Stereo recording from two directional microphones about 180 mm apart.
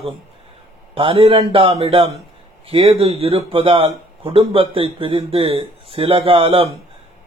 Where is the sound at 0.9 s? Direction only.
30° right (ahead or behind).